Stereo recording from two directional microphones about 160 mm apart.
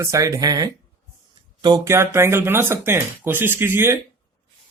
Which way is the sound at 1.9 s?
15° right (ahead or behind).